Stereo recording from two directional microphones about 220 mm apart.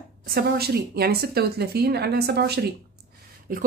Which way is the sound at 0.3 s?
45° right (ahead or behind).